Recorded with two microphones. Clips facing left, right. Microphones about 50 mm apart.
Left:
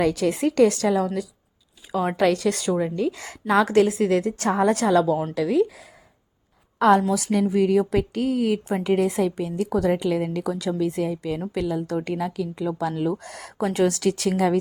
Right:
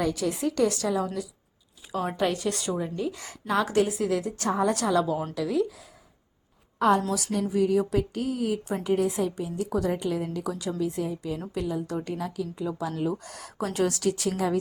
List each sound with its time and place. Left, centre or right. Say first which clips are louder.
0.0 s a woman's voice: left 6 dB; left
2.6 s a woman's voice: left 6 dB; left
5.3 s speech: left 5 dB; left
6.7 s a woman's voice: left 5 dB; left
7.5 s speech: left 2 dB; left
9.6 s a woman's voice: left 6 dB; left
11.8 s speech: left 5 dB; left
12.4 s speech: left 5 dB; left
13.2 s a woman's voice: left 6 dB; left
14.0 s speech: left 5 dB; left